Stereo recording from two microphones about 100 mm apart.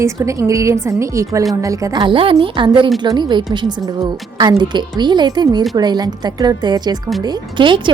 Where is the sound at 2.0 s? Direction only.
65° right (ahead or behind).